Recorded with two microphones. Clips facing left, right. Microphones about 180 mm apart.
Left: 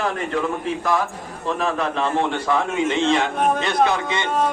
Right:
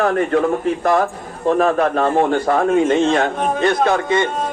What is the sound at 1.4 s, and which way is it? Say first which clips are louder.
A man's voice: right 8 dB; 50° right (ahead or behind).